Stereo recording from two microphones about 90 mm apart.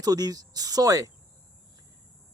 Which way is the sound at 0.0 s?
45° right (ahead or behind).